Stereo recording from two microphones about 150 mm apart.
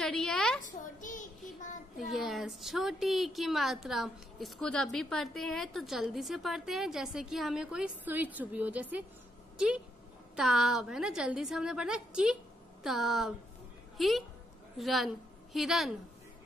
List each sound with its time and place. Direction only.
0.0 s a woman's voice: 5° left (ahead or behind)
0.6 s a child's voice: 60° left (ahead or behind)
2.0 s a woman's voice: centre (ahead or behind)
10.3 s a woman's voice: centre (ahead or behind)